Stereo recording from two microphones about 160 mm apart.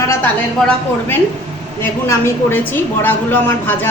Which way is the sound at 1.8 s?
15° left (ahead or behind).